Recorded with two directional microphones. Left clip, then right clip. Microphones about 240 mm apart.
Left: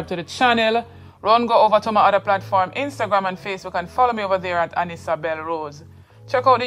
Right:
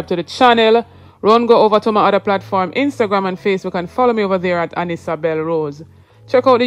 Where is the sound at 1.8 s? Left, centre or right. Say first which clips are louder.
Right 3 dB; right.